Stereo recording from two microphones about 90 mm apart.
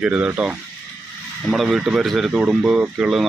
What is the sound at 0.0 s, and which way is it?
Speech, 10° right (ahead or behind).